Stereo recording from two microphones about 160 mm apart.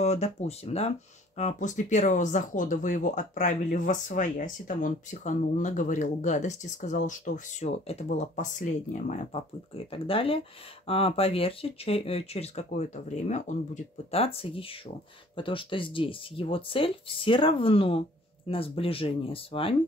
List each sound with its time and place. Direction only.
0.0 s speech: 45° left (ahead or behind)
9.3 s speech: 35° left (ahead or behind)
14.1 s speech: 35° left (ahead or behind)